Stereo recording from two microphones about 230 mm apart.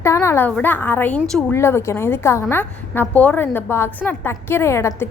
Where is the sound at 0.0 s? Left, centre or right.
Centre.